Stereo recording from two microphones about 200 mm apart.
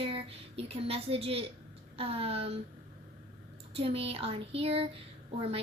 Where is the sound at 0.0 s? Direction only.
30° right (ahead or behind).